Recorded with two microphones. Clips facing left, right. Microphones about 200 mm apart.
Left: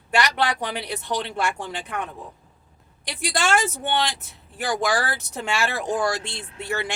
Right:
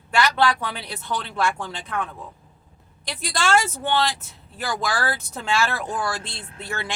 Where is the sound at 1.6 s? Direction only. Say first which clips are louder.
Right 1 dB; 15° left (ahead or behind).